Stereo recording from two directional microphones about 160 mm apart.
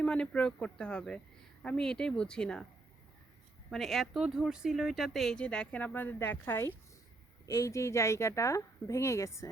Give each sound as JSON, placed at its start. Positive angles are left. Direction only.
{"t": 0.0, "sound": "speech", "side_deg": 5}
{"t": 3.7, "sound": "speech", "side_deg": 0}